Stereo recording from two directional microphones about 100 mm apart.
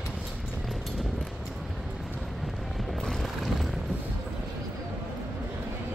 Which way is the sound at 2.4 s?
Centre (ahead or behind).